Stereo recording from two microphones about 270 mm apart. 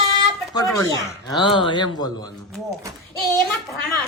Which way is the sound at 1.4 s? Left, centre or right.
Centre.